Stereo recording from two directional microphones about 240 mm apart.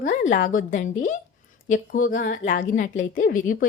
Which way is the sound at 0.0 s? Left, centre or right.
Left.